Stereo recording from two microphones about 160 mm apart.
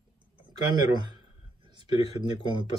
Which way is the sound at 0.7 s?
25° right (ahead or behind).